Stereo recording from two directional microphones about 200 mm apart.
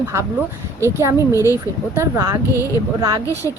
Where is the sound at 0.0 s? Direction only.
15° right (ahead or behind).